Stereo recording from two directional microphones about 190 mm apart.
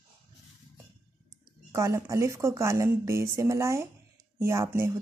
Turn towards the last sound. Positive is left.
turn(degrees=-15)  # may be behind; listen again after turning